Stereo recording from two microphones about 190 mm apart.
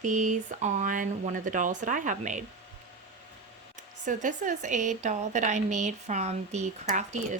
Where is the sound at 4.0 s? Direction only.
40° right (ahead or behind).